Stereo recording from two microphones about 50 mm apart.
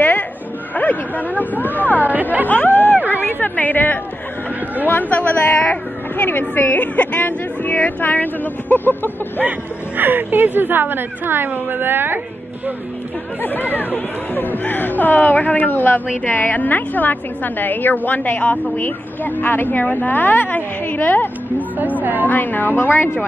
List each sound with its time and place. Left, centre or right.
0.7 s a man's voice: left
2.4 s chatter: left
4.8 s a woman's voice: left
9.4 s speech: right
13.4 s a woman's voice: left
21.5 s a woman's voice: right
22.3 s a woman's voice: left